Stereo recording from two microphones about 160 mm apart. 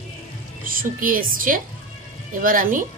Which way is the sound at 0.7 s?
60° right (ahead or behind).